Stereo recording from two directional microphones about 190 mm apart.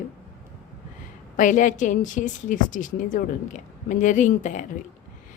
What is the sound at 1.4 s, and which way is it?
A woman's voice, 40° left (ahead or behind).